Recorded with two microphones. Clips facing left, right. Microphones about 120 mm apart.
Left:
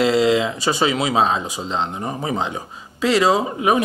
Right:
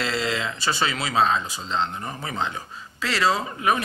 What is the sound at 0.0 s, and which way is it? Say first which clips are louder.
Speech: left 10 dB; 10° left (ahead or behind).